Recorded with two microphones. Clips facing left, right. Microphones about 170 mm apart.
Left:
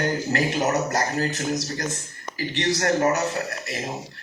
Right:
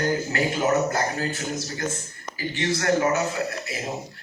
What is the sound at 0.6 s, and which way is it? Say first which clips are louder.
A man's voice: right 1 dB; 40° left (ahead or behind).